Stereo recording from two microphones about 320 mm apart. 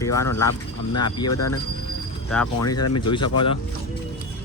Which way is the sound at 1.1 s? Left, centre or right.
Centre.